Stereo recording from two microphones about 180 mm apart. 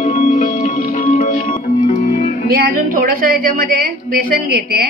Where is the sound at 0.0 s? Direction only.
40° left (ahead or behind).